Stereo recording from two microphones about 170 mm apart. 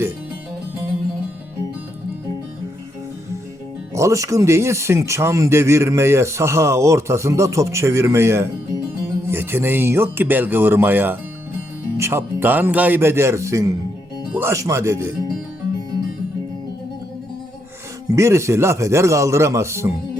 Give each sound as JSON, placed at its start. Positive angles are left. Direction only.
{"t": 3.9, "sound": "speech", "side_deg": -20}
{"t": 18.1, "sound": "speech", "side_deg": -15}